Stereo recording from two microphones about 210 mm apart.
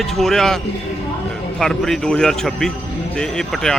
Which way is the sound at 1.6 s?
Centre (ahead or behind).